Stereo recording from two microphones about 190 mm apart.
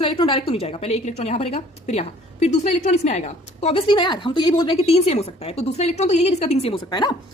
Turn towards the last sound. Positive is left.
turn(degrees=20)  # may be behind; listen again after turning